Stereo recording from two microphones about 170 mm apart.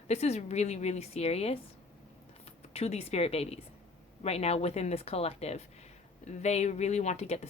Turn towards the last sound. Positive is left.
turn(degrees=40)  # may be behind; listen again after turning